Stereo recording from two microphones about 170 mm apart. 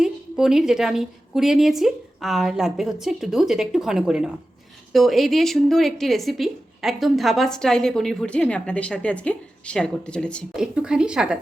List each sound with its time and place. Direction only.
0.0 s a woman's voice: 5° right (ahead or behind)
10.8 s a woman's voice: 5° right (ahead or behind)